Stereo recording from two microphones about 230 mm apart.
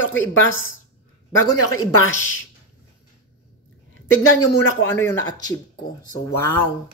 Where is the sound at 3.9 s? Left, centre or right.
Left.